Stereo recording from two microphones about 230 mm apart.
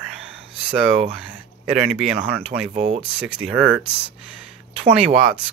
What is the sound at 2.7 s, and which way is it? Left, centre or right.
Speech, right.